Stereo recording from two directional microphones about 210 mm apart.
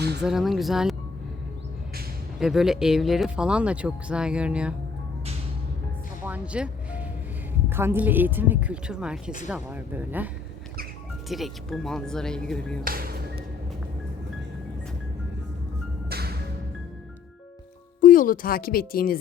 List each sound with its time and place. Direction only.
0.2 s speech: centre (ahead or behind)
2.4 s speech: centre (ahead or behind)
6.2 s music: 5° right (ahead or behind)
7.7 s speech: 10° right (ahead or behind)
11.3 s speech: centre (ahead or behind)
12.8 s music: 45° right (ahead or behind)
16.0 s music: 50° right (ahead or behind)
18.0 s speech: 40° left (ahead or behind)